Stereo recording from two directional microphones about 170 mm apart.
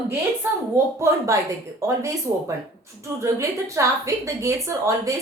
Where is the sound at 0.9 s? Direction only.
15° right (ahead or behind).